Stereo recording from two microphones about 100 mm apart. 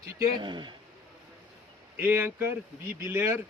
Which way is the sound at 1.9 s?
25° right (ahead or behind).